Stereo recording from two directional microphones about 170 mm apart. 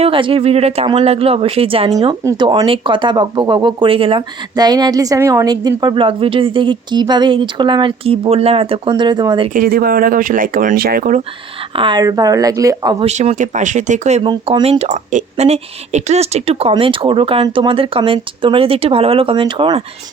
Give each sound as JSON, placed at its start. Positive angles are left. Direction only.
{"t": 0.0, "sound": "speech", "side_deg": -30}
{"t": 9.5, "sound": "speech", "side_deg": -55}
{"t": 11.7, "sound": "speech", "side_deg": -30}
{"t": 13.1, "sound": "speech", "side_deg": -40}
{"t": 14.3, "sound": "speech", "side_deg": -30}